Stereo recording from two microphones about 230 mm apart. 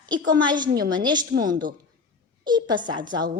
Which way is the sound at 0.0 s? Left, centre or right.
Centre.